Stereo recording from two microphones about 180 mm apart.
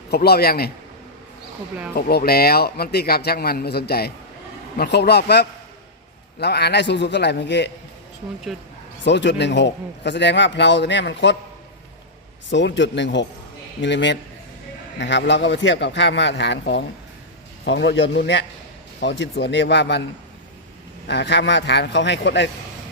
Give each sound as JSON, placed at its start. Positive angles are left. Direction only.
{"t": 0.1, "sound": "a man's voice", "side_deg": 60}
{"t": 2.0, "sound": "a man's voice", "side_deg": 60}
{"t": 9.0, "sound": "a man's voice", "side_deg": 75}
{"t": 12.5, "sound": "a man's voice", "side_deg": 85}
{"t": 21.1, "sound": "a man's voice", "side_deg": 75}